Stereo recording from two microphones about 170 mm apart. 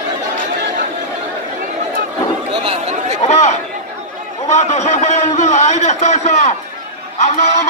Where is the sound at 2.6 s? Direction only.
40° right (ahead or behind).